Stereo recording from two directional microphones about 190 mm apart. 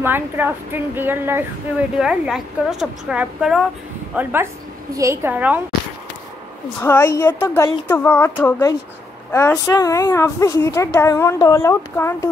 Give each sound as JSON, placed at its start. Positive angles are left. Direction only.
{"t": 0.0, "sound": "a woman's voice", "side_deg": -10}
{"t": 6.8, "sound": "a woman's voice", "side_deg": 10}